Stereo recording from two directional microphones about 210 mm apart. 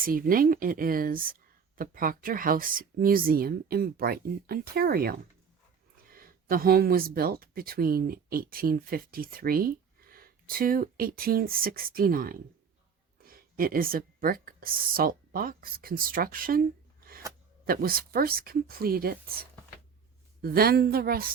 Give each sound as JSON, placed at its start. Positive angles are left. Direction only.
{"t": 0.0, "sound": "speech", "side_deg": -40}
{"t": 17.7, "sound": "speech", "side_deg": -45}